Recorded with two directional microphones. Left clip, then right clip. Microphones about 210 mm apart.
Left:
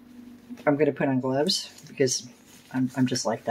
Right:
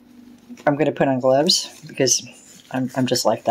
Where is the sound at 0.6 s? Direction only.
40° right (ahead or behind).